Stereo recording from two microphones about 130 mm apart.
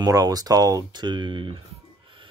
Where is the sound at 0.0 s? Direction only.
30° right (ahead or behind).